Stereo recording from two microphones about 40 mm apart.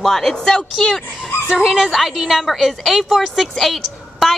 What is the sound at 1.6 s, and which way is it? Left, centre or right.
A woman's voice, centre.